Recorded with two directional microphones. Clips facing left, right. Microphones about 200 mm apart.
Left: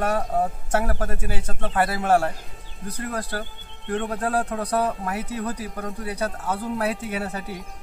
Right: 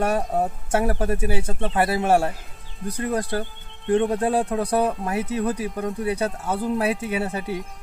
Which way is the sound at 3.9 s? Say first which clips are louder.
Right 6 dB; 30° right (ahead or behind).